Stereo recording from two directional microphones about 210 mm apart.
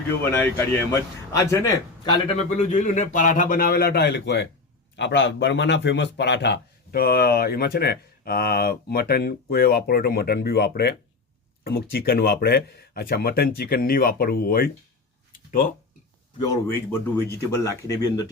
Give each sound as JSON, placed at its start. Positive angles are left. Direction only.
{"t": 0.3, "sound": "speech", "side_deg": 10}
{"t": 2.6, "sound": "a man's voice", "side_deg": 35}
{"t": 16.4, "sound": "speech", "side_deg": 15}